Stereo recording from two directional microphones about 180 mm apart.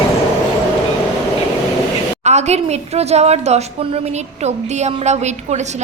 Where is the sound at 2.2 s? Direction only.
40° right (ahead or behind).